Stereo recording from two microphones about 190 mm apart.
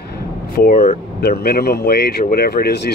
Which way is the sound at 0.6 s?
45° left (ahead or behind).